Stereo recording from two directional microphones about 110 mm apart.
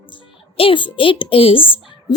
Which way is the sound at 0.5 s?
55° left (ahead or behind).